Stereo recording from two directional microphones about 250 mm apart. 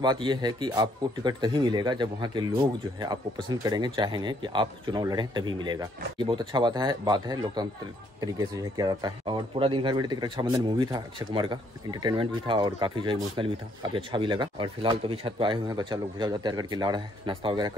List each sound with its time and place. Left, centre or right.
0.0 s speech: centre